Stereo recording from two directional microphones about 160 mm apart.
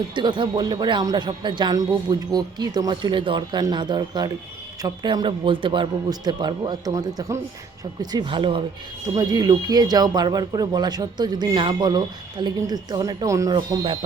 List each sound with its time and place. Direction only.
0.1 s speech: 30° right (ahead or behind)
8.1 s speech: 30° right (ahead or behind)